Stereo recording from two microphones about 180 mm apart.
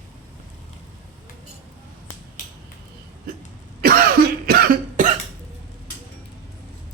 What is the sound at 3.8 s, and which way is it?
Cough, 55° right (ahead or behind).